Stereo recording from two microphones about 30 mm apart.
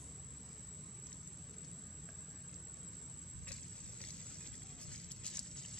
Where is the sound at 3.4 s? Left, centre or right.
Left.